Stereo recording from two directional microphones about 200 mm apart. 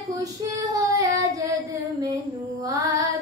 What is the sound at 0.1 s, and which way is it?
Child singing, 15° right (ahead or behind).